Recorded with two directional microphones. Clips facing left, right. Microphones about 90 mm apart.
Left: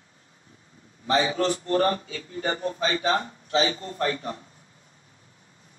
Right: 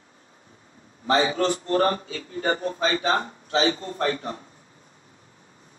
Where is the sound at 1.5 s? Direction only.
30° right (ahead or behind).